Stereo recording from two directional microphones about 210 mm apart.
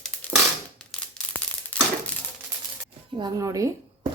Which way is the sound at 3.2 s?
15° right (ahead or behind).